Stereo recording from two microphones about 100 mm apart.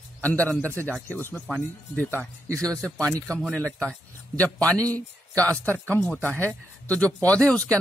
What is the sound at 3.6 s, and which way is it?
A man's voice, 10° left (ahead or behind).